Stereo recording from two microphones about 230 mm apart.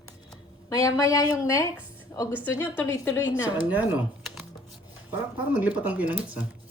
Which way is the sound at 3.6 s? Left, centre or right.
Centre.